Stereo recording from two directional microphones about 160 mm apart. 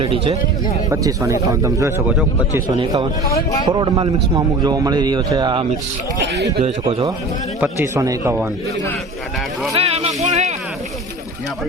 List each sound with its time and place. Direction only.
0.0 s speech: 35° right (ahead or behind)
0.9 s a man's voice: 20° right (ahead or behind)
2.0 s speech: 10° right (ahead or behind)
2.6 s a man's voice: 30° right (ahead or behind)
6.3 s speech: 90° right
7.6 s speech: 15° right (ahead or behind)
9.7 s a sound: 40° right (ahead or behind)